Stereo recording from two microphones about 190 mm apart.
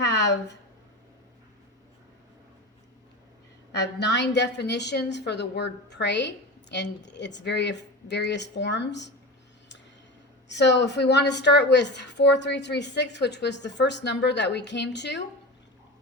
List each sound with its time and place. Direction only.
0.0 s a sound: 65° left (ahead or behind)
3.8 s a woman's voice: 65° left (ahead or behind)
10.5 s a woman's voice: 65° left (ahead or behind)